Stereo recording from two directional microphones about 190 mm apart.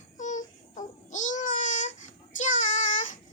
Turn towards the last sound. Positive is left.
turn(degrees=45)  # may be behind; listen again after turning